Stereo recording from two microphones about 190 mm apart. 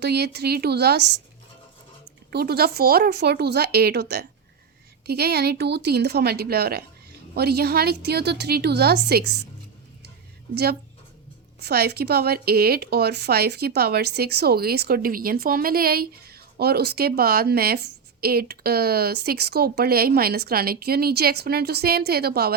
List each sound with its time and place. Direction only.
0.0 s speech: 60° right (ahead or behind)
2.3 s speech: 55° right (ahead or behind)
10.5 s speech: 60° right (ahead or behind)